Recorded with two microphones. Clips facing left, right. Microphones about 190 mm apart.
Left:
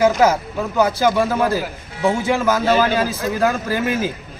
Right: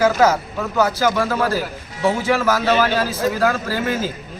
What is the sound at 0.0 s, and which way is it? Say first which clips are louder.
A man's voice: left 1 dB; 15° left (ahead or behind).